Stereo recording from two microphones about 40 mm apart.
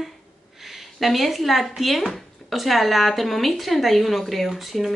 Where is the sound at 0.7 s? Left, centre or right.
Centre.